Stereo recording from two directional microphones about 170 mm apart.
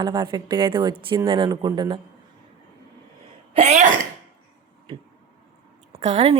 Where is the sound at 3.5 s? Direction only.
40° right (ahead or behind).